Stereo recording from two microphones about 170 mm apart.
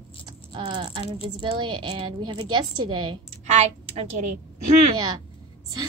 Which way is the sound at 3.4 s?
40° right (ahead or behind).